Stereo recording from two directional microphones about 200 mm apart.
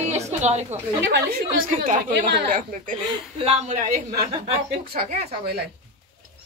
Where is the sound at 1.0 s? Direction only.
55° right (ahead or behind); by 5.3 s 40° right (ahead or behind).